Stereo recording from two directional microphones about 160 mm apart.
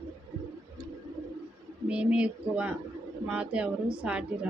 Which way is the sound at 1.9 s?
5° right (ahead or behind).